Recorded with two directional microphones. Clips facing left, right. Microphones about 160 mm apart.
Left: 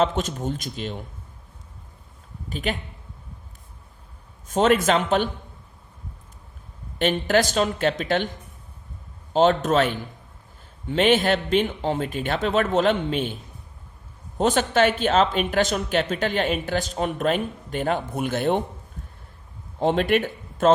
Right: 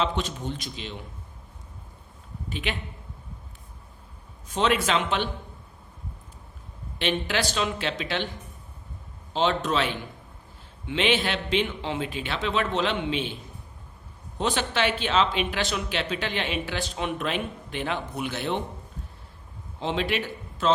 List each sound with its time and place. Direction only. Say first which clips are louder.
0.0 s speech: left 5 dB; 45° left (ahead or behind)
2.5 s speech: left 4 dB; 40° left (ahead or behind)
4.4 s speech: left 5 dB; 45° left (ahead or behind)
7.0 s speech: left 6 dB; 45° left (ahead or behind)
9.3 s speech: left 6 dB; 45° left (ahead or behind)
14.3 s speech: left 7 dB; 45° left (ahead or behind)
19.8 s a man's voice: left 7 dB; 50° left (ahead or behind)